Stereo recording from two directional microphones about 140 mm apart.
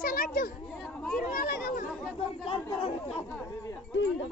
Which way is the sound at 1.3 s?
80° left.